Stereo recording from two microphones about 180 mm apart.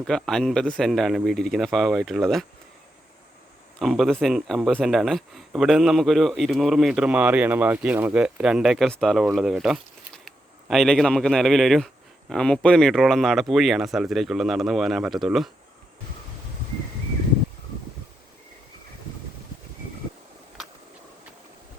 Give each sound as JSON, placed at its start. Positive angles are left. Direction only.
{"t": 0.0, "sound": "speech", "side_deg": 5}
{"t": 3.8, "sound": "speech", "side_deg": 0}